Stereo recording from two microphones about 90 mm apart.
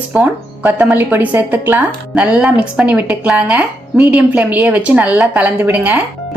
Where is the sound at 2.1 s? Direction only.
10° right (ahead or behind).